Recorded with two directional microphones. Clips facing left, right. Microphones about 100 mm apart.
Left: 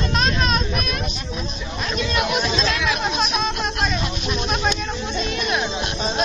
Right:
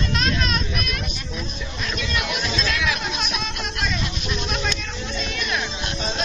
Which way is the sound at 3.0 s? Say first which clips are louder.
Left 6 dB; 30° left (ahead or behind).